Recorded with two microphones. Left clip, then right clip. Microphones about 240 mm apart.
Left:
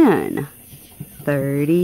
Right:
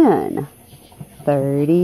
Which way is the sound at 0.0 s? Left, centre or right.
Centre.